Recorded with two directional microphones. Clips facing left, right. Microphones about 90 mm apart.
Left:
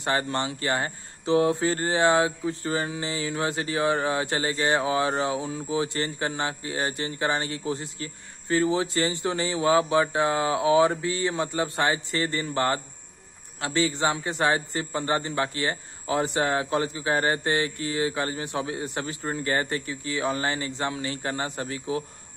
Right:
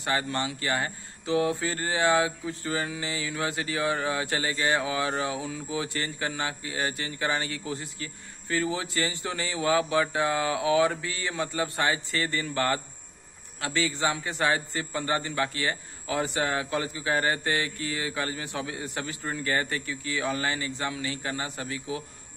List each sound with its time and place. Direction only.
0.0 s speech: 30° left (ahead or behind)